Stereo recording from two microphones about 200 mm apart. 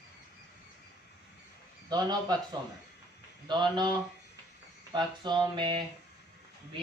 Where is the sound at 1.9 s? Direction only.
20° right (ahead or behind).